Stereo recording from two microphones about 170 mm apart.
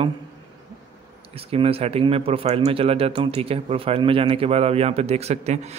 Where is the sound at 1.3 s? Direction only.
35° right (ahead or behind).